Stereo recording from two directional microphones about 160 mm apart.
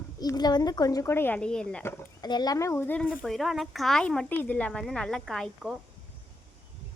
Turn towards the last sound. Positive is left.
turn(degrees=0)  # may be behind; listen again after turning